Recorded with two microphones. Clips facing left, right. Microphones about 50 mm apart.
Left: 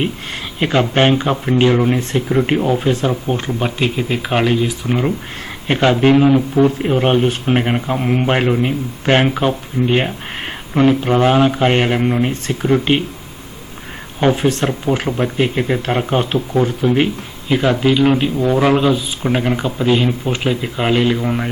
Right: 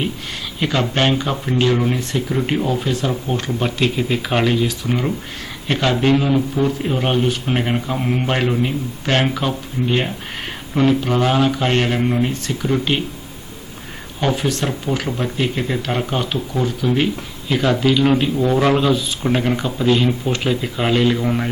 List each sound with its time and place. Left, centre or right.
0.6 s speech: left
3.1 s speech: centre
14.2 s speech: left; by 21.5 s centre